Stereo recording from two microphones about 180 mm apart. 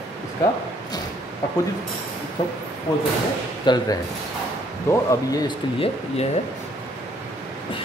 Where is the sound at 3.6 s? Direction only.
25° left (ahead or behind).